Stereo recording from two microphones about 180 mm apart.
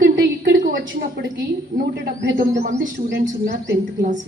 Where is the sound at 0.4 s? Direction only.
45° right (ahead or behind).